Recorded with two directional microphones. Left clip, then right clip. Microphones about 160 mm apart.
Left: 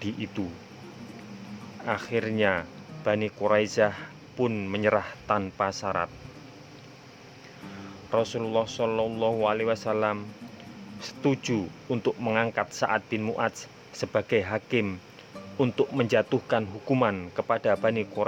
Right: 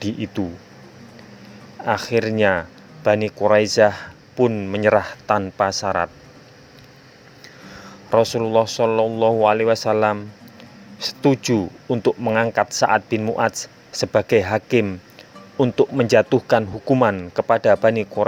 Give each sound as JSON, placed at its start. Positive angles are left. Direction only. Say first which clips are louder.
{"t": 0.0, "sound": "speech", "louder": "right 8 dB", "side_deg": -20}
{"t": 1.8, "sound": "speech", "louder": "right 9 dB", "side_deg": -25}
{"t": 8.1, "sound": "speech", "louder": "right 9 dB", "side_deg": -30}